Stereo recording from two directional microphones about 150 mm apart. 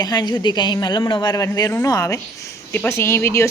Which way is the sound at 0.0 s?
25° left (ahead or behind).